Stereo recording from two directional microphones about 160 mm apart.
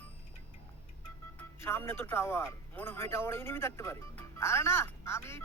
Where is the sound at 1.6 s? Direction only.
15° left (ahead or behind).